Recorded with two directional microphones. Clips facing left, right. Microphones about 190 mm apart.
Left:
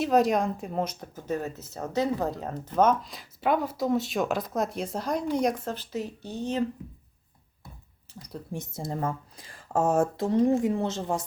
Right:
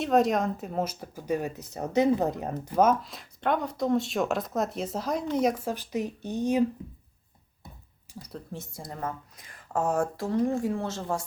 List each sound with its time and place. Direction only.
0.0 s speech: centre (ahead or behind)
8.1 s a sound: 10° right (ahead or behind)
8.5 s speech: 20° left (ahead or behind)